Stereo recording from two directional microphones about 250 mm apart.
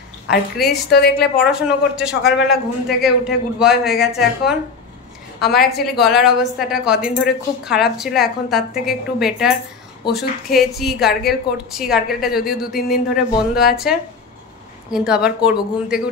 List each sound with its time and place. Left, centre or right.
0.8 s a woman's voice: left
1.4 s a woman's voice: centre
5.4 s a woman's voice: left
5.9 s a woman's voice: centre